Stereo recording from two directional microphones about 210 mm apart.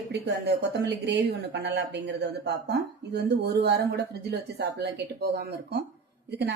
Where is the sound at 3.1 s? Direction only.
50° right (ahead or behind).